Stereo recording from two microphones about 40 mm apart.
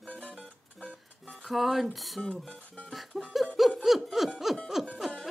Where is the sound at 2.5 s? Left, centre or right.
Left.